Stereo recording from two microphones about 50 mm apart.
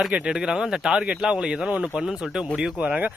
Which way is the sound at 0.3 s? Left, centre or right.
Centre.